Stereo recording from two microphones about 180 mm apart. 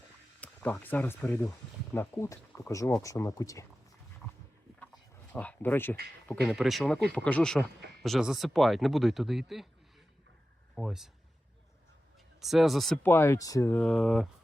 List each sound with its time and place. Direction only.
0.3 s speech: 10° left (ahead or behind)
5.3 s speech: 10° left (ahead or behind)
6.2 s speech: centre (ahead or behind)
10.8 s speech: centre (ahead or behind)
12.4 s speech: centre (ahead or behind)
13.1 s speech: 15° left (ahead or behind)